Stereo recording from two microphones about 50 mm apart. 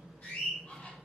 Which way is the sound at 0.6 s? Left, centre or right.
Left.